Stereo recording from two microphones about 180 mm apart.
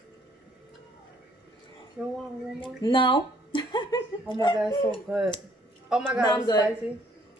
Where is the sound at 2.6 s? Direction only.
30° left (ahead or behind).